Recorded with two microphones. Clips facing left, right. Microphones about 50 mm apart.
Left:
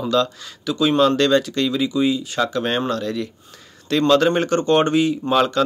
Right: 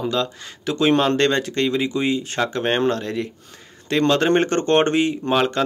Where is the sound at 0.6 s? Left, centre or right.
Right.